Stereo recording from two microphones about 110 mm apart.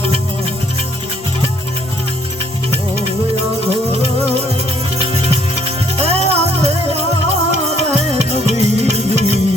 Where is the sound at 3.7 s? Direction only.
65° right (ahead or behind).